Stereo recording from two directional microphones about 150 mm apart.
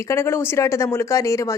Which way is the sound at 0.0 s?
20° left (ahead or behind).